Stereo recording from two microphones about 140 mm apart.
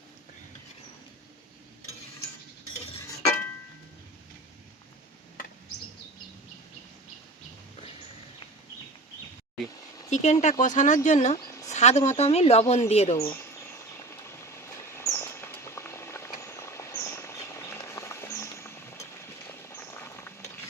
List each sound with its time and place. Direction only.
10.1 s speech: 55° left (ahead or behind)
13.1 s speech: 20° left (ahead or behind)
14.1 s rodents: 20° left (ahead or behind)